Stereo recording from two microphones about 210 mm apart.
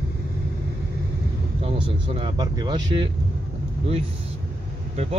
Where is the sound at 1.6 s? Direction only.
25° right (ahead or behind).